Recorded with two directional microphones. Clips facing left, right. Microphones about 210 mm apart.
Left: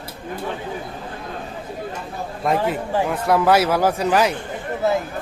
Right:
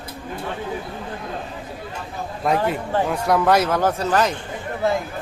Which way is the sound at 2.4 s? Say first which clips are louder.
Even; centre (ahead or behind).